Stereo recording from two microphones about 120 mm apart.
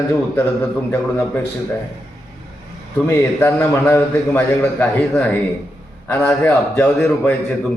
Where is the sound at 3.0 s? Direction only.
25° left (ahead or behind).